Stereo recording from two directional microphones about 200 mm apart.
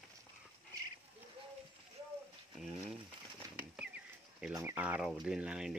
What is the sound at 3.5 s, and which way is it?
Bird flight, 5° right (ahead or behind).